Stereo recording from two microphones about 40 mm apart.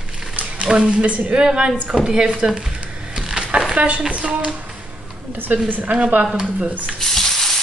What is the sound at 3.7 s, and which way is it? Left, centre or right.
A woman's voice, right.